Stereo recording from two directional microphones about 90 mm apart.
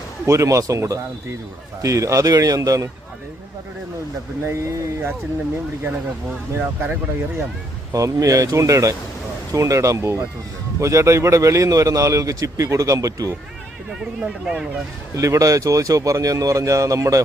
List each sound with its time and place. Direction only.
0.3 s a man's voice: 35° right (ahead or behind)
4.4 s a man's voice: 35° right (ahead or behind)
6.6 s speech: 20° right (ahead or behind)
7.9 s a man's voice: 35° right (ahead or behind)
14.0 s speech: 10° right (ahead or behind)
15.1 s a man's voice: 35° right (ahead or behind)